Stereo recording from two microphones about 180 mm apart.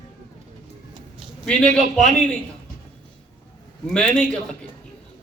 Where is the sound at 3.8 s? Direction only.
5° left (ahead or behind).